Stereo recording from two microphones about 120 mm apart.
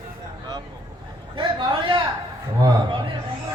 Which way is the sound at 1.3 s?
45° right (ahead or behind).